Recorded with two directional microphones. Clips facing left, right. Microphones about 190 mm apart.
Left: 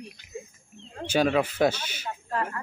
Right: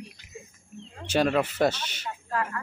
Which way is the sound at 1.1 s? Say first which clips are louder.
Left 1 dB; centre (ahead or behind).